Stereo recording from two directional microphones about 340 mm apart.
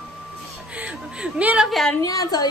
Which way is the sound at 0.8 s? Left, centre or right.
Centre.